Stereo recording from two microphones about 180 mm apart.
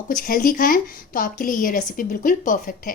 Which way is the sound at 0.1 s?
50° left (ahead or behind).